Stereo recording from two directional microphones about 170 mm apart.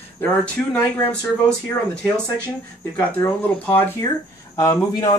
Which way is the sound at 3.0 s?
10° left (ahead or behind).